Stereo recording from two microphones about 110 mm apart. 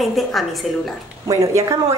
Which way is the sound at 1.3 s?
30° right (ahead or behind).